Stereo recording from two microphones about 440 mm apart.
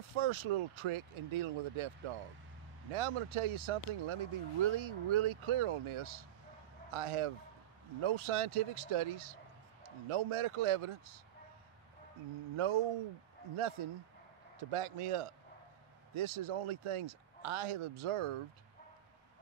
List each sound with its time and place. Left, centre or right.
0.1 s speech: right
2.9 s speech: right
12.5 s speech: right